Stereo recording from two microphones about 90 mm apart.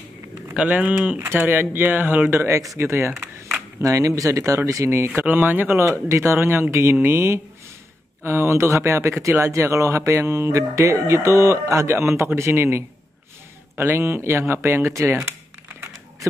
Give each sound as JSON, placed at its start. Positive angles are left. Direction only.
{"t": 0.6, "sound": "speech", "side_deg": -15}